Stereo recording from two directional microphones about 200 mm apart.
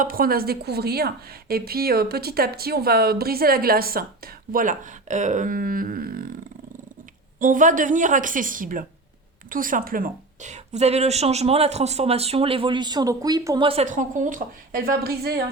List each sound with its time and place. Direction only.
0.0 s a woman's voice: 45° right (ahead or behind)
7.3 s a woman's voice: 40° right (ahead or behind); by 13.7 s 20° right (ahead or behind)
13.7 s a woman's voice: 35° right (ahead or behind); by 15.4 s 50° right (ahead or behind)